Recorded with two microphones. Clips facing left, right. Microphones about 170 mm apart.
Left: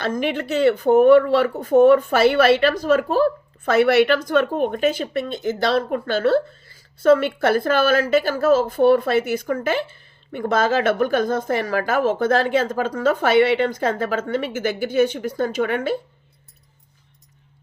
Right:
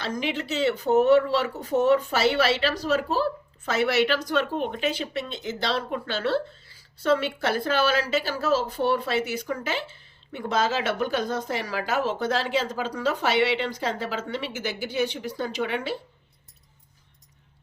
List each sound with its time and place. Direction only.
0.0 s speech: 55° left (ahead or behind)